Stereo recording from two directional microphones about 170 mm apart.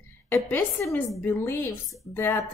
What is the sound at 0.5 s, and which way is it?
A woman's voice, 10° left (ahead or behind).